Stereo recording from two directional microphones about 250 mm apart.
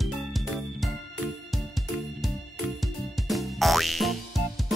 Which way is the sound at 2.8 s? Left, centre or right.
Centre.